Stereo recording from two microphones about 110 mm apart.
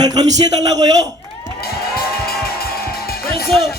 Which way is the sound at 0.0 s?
35° right (ahead or behind).